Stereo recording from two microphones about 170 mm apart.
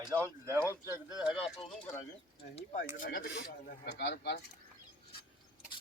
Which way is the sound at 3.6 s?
70° left (ahead or behind).